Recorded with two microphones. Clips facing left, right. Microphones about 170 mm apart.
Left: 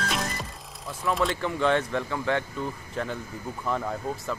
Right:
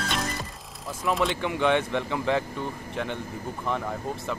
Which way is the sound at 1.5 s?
15° right (ahead or behind).